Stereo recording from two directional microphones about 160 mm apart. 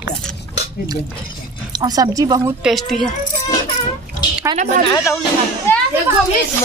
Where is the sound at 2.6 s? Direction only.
Centre (ahead or behind).